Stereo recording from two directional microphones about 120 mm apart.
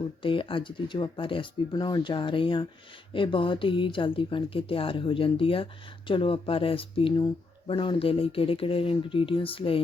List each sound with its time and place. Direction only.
0.2 s speech: 45° left (ahead or behind)